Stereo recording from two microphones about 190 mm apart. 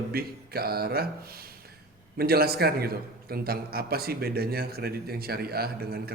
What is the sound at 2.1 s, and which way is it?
A man's voice, 55° right (ahead or behind).